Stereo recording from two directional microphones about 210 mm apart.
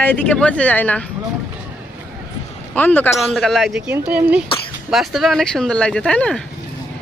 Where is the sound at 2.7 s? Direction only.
10° left (ahead or behind).